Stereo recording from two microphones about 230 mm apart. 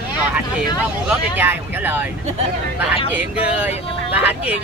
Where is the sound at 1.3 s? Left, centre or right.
Centre.